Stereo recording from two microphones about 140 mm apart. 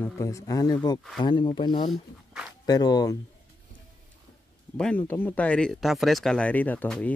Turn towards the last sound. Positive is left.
turn(degrees=10)  # may be behind; listen again after turning